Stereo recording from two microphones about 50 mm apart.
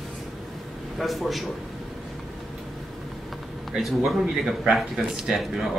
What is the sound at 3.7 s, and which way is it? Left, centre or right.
A man's voice, centre.